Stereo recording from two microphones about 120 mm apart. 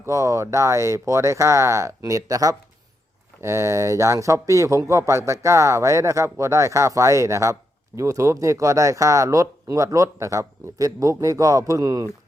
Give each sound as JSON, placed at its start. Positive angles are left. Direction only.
{"t": 0.0, "sound": "speech", "side_deg": -25}